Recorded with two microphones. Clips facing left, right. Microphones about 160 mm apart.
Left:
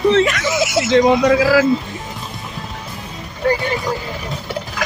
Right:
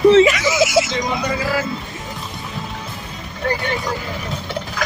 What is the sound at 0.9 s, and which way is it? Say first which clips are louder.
Speech: left 10 dB; 70° left (ahead or behind).